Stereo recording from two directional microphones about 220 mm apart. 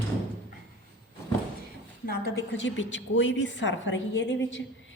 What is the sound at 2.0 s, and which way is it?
A woman's voice, 50° left (ahead or behind).